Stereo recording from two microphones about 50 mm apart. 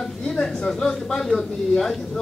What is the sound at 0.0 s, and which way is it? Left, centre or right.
Speech, centre.